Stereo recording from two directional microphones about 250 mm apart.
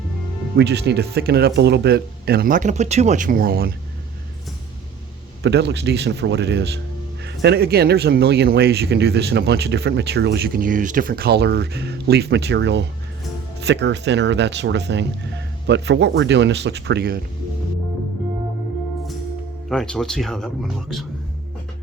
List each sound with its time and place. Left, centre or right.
0.5 s speech: right
5.4 s speech: right
19.7 s speech: centre